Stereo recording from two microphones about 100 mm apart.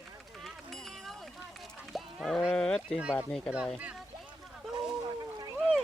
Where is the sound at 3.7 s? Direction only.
10° right (ahead or behind).